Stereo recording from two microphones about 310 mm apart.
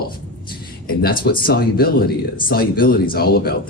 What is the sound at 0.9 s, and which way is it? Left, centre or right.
Speech, left.